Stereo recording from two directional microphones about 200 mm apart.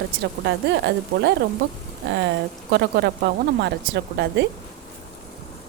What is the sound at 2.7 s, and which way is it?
A woman's voice, 55° right (ahead or behind).